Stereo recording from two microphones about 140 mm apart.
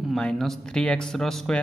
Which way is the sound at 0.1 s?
5° left (ahead or behind).